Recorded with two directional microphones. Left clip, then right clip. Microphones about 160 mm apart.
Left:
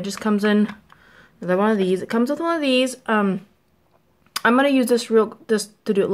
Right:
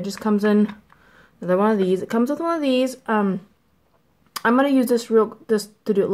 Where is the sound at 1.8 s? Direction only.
5° right (ahead or behind).